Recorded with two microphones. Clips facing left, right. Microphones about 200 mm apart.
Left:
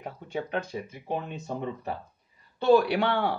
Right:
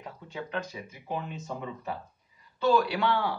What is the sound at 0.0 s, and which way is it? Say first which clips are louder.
Speech: left 5 dB; 55° left (ahead or behind).